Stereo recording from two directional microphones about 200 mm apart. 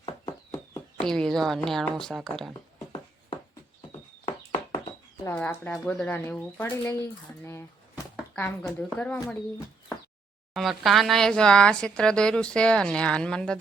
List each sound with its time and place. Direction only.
0.5 s a sound: 20° left (ahead or behind)
1.0 s speech: 5° left (ahead or behind)
5.2 s speech: 10° left (ahead or behind)
10.5 s speech: centre (ahead or behind)